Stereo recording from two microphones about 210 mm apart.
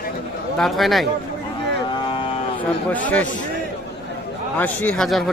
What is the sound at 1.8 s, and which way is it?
Vehicle, 25° left (ahead or behind).